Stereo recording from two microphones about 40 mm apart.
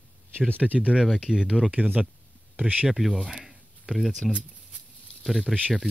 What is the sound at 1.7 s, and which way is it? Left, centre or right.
Speech, right.